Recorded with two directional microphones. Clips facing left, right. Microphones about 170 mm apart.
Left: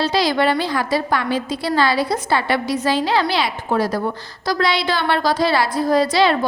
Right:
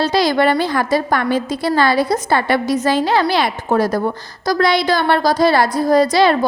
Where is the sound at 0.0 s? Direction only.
45° right (ahead or behind).